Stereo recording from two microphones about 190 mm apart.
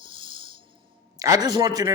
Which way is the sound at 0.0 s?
25° right (ahead or behind).